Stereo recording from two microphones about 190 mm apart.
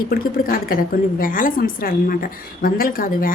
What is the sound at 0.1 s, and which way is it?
A woman's voice, 50° left (ahead or behind).